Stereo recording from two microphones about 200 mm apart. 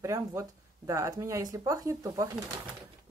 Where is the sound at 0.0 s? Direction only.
15° right (ahead or behind).